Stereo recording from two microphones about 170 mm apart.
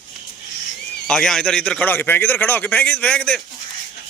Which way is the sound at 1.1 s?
5° left (ahead or behind).